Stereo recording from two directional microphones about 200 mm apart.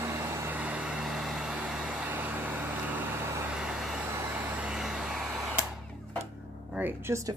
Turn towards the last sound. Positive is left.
turn(degrees=-15)  # may be behind; listen again after turning